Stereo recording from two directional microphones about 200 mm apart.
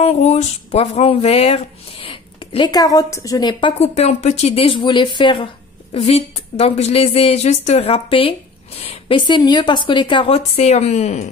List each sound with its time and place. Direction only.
0.0 s a woman's voice: 35° left (ahead or behind)
3.8 s a woman's voice: 35° left (ahead or behind)